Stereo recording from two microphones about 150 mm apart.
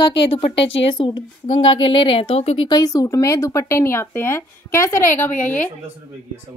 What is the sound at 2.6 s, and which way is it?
A woman's voice, 25° left (ahead or behind).